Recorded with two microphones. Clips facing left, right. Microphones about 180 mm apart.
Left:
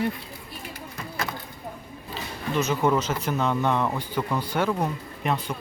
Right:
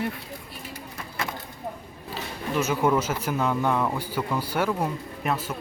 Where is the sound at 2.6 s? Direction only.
10° right (ahead or behind).